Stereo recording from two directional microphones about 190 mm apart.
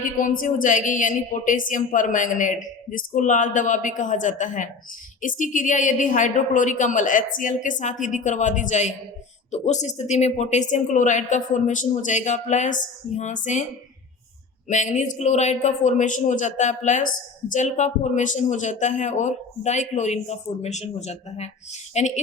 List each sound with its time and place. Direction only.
0.0 s speech: 45° left (ahead or behind)
14.7 s speech: 40° left (ahead or behind)